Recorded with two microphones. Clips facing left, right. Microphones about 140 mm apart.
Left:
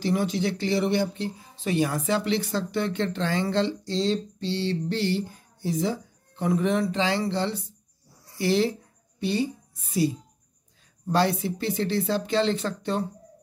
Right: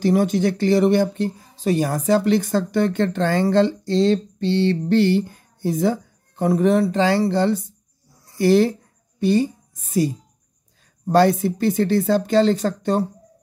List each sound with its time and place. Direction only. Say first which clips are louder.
0.0 s a woman's voice: right 7 dB; 45° right (ahead or behind)